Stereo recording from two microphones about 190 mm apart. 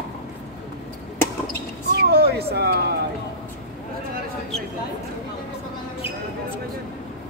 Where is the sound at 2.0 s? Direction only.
55° right (ahead or behind).